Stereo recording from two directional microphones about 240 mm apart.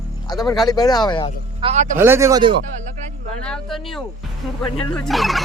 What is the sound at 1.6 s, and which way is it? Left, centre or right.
Speech, right.